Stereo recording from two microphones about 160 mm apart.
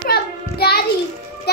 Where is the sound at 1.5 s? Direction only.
85° left.